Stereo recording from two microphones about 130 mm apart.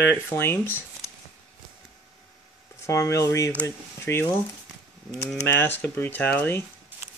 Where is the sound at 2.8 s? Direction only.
25° left (ahead or behind).